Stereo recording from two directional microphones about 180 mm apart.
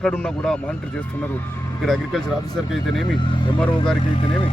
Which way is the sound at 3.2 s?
30° left (ahead or behind).